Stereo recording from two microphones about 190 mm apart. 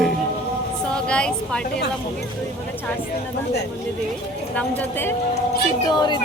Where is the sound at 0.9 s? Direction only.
5° left (ahead or behind).